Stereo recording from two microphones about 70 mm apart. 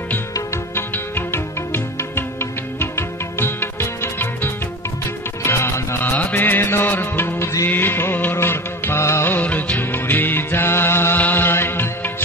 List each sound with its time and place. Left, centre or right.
0.7 s music: left
9.4 s music: left